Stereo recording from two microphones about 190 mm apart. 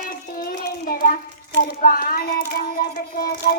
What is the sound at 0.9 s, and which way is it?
Child singing, 45° left (ahead or behind).